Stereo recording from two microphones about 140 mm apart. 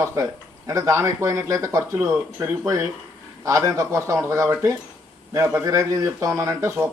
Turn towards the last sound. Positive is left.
turn(degrees=-20)  # may be behind; listen again after turning